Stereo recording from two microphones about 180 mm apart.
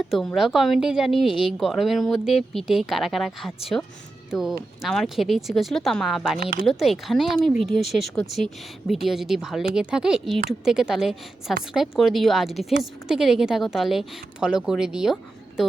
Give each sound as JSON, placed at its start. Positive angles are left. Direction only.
{"t": 0.1, "sound": "a woman's voice", "side_deg": 0}
{"t": 6.4, "sound": "speech", "side_deg": -55}
{"t": 6.7, "sound": "a woman's voice", "side_deg": 0}